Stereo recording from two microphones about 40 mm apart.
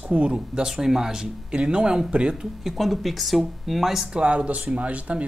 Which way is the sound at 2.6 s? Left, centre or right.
Centre.